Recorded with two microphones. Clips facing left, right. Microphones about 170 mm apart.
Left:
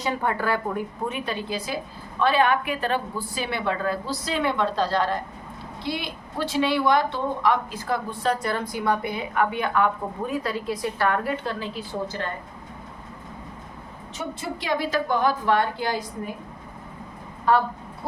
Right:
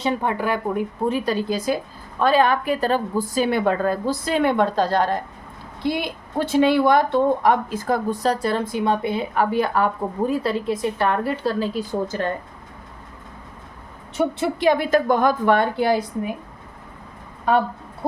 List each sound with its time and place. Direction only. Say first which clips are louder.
0.0 s speech: right 3 dB; 20° right (ahead or behind)
1.0 s a woman's voice: right 10 dB; 35° right (ahead or behind)
14.2 s a woman's voice: right 10 dB; 65° right (ahead or behind)